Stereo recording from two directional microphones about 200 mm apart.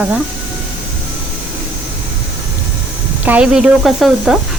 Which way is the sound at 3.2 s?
5° right (ahead or behind).